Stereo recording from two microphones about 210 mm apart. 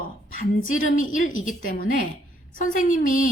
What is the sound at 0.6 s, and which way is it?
A woman's voice, 40° left (ahead or behind).